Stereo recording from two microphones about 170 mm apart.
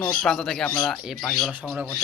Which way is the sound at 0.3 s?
5° left (ahead or behind).